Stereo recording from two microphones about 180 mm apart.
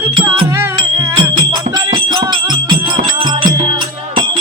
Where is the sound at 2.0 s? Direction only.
25° right (ahead or behind).